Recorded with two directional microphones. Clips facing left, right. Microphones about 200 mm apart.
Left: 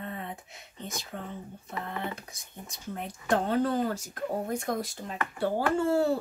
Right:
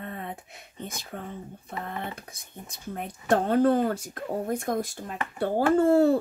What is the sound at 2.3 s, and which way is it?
Speech, 55° right (ahead or behind).